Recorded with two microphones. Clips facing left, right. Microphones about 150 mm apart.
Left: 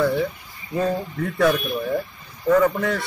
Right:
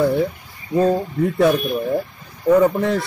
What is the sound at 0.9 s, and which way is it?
Speech, 20° right (ahead or behind).